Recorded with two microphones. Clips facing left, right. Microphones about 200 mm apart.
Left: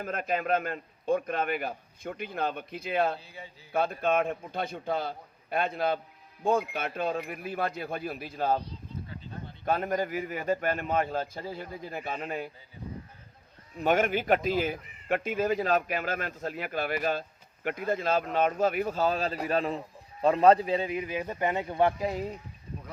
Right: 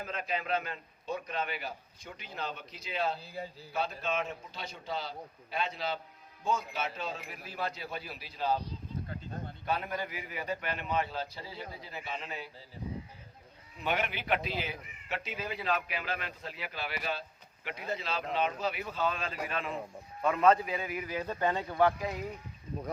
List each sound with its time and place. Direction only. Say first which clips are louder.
0.0 s a man's voice: left 6 dB; 50° left (ahead or behind)
9.6 s a man's voice: left 7 dB; 50° left (ahead or behind)
13.7 s a man's voice: left 8 dB; 45° left (ahead or behind); by 22.3 s 30° left (ahead or behind)